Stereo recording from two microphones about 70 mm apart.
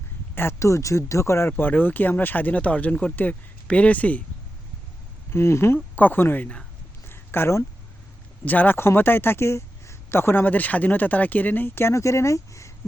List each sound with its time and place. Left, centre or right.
0.3 s speech: left
5.3 s speech: left
6.0 s speech: left
7.1 s a sound: left
8.4 s speech: left